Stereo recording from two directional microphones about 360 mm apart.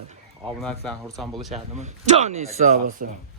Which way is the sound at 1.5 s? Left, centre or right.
Centre.